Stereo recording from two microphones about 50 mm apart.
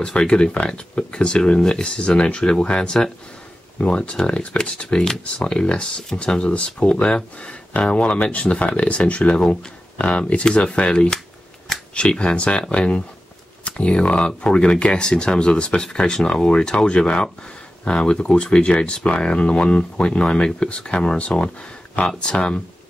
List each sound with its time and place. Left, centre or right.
0.0 s speech: centre